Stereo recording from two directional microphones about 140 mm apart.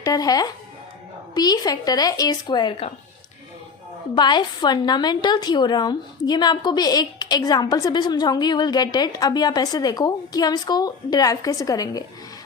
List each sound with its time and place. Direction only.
0.0 s a woman's voice: 25° left (ahead or behind)
4.1 s a woman's voice: 35° left (ahead or behind)